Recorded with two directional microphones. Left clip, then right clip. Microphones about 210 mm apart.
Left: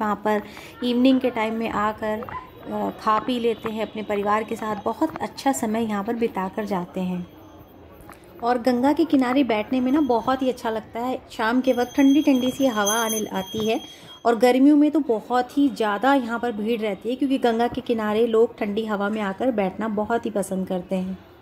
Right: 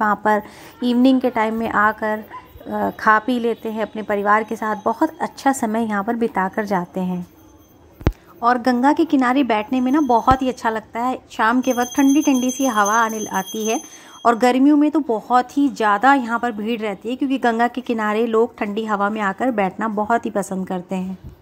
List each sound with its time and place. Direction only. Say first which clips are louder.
0.0 s a woman's voice: right 6 dB; 15° right (ahead or behind)
8.4 s a woman's voice: right 4 dB; 15° right (ahead or behind)